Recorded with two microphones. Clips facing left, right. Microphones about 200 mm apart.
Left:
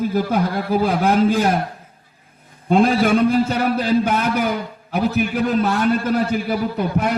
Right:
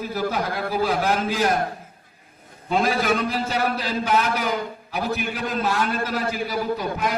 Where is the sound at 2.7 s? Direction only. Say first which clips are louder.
Left 6 dB; 50° left (ahead or behind).